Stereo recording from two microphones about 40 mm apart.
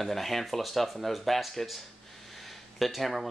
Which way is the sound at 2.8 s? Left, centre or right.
Centre.